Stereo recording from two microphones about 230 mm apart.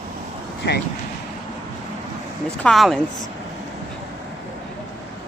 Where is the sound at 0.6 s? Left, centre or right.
Left.